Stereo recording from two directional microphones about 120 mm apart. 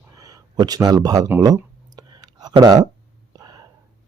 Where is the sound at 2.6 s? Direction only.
35° right (ahead or behind).